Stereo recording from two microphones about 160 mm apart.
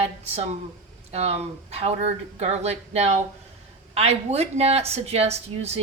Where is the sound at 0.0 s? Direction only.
40° right (ahead or behind).